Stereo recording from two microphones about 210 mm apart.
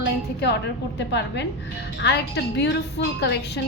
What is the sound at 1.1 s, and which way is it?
A woman's voice, 55° left (ahead or behind).